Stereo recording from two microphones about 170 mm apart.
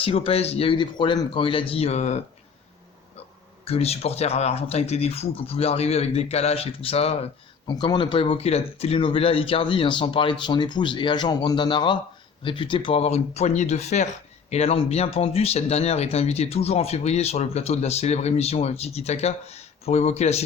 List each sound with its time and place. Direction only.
0.0 s speech: 35° left (ahead or behind)
3.7 s speech: 35° left (ahead or behind)
7.7 s speech: 25° left (ahead or behind); by 20.4 s 40° left (ahead or behind)